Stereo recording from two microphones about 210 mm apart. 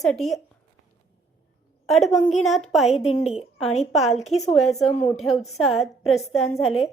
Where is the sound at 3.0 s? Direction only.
30° left (ahead or behind).